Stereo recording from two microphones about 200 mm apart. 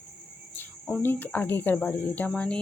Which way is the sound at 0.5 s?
5° left (ahead or behind).